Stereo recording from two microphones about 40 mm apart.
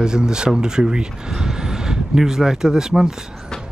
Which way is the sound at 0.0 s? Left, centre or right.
Centre.